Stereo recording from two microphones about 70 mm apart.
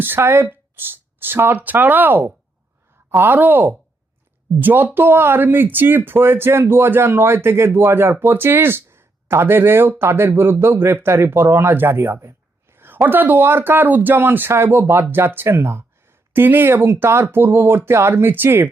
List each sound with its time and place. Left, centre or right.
0.0 s speech: right